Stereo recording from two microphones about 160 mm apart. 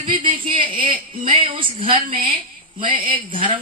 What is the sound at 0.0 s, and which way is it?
A man's voice, 35° right (ahead or behind).